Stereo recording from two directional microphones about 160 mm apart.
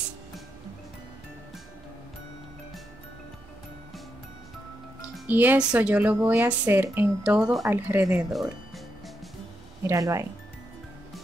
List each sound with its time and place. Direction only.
5.3 s speech: 10° right (ahead or behind)
9.8 s speech: 20° right (ahead or behind)